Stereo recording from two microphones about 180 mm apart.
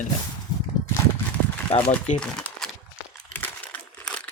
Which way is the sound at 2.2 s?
5° left (ahead or behind).